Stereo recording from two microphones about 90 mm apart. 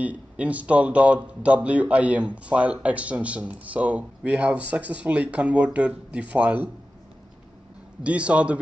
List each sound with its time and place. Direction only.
0.0 s speech: 15° right (ahead or behind)
8.0 s speech: 15° right (ahead or behind)